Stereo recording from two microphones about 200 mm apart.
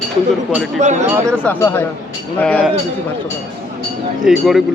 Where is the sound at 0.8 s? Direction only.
35° right (ahead or behind).